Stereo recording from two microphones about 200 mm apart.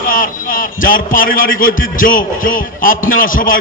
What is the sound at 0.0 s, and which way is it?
A man's voice, 45° left (ahead or behind).